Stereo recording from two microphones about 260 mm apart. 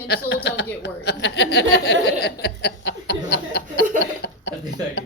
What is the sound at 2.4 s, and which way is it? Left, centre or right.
Chuckle, left.